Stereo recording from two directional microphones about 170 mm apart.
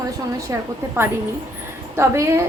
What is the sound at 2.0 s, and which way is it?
Speech, 15° right (ahead or behind).